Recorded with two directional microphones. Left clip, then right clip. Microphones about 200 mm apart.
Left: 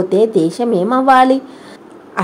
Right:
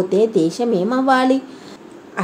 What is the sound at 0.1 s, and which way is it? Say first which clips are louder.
A woman's voice: left 4 dB; 20° left (ahead or behind).